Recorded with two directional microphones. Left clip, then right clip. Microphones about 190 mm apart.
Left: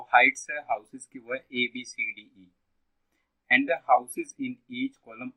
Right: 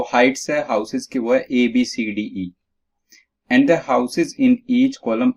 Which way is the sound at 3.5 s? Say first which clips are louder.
Right 6 dB; 35° right (ahead or behind).